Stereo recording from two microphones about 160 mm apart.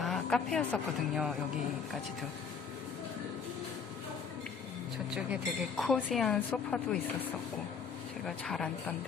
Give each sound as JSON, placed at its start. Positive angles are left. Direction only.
{"t": 0.0, "sound": "speech", "side_deg": 0}
{"t": 5.1, "sound": "a woman's voice", "side_deg": 0}
{"t": 8.3, "sound": "a woman's voice", "side_deg": 0}